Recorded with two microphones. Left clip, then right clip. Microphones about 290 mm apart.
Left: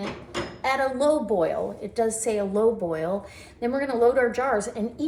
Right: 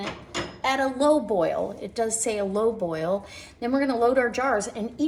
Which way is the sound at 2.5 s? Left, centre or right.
Right.